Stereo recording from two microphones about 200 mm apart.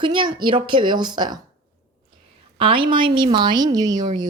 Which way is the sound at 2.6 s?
25° right (ahead or behind).